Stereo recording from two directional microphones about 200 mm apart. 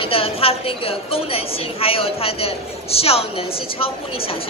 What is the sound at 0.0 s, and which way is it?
A woman's voice, 30° left (ahead or behind).